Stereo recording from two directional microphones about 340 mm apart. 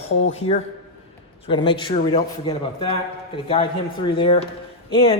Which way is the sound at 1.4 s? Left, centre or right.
Centre.